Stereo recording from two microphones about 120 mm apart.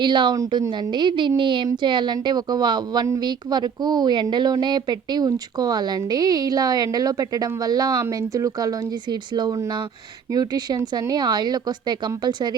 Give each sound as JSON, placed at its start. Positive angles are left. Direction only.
{"t": 0.0, "sound": "a woman's voice", "side_deg": -40}
{"t": 0.3, "sound": "a woman's voice", "side_deg": -30}